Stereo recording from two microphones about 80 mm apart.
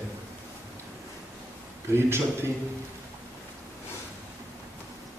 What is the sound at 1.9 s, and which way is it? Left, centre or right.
Speech, right.